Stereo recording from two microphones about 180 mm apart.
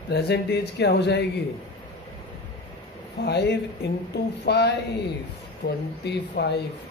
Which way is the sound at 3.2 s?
70° left (ahead or behind).